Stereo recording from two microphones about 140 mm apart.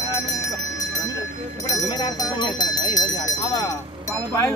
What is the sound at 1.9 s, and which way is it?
Speech, 30° left (ahead or behind).